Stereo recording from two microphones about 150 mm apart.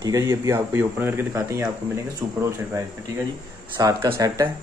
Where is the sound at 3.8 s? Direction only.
25° right (ahead or behind).